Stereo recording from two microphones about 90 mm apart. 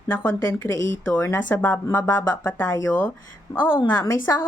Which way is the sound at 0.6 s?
35° left (ahead or behind).